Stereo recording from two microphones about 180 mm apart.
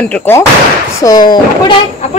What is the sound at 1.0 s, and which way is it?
Speech, 25° left (ahead or behind).